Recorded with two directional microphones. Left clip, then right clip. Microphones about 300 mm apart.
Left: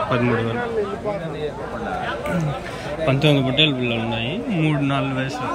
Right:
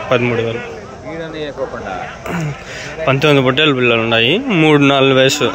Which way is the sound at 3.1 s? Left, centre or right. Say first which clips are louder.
Right 8 dB; centre.